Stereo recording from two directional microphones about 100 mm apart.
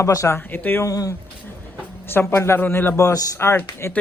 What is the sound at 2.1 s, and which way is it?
A man's voice, 25° left (ahead or behind).